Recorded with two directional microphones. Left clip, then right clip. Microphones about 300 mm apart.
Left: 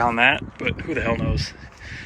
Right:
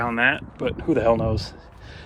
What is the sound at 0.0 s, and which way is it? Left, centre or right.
Speech, centre.